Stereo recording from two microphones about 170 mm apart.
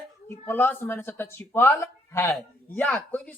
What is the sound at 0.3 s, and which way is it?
Speech, 10° left (ahead or behind).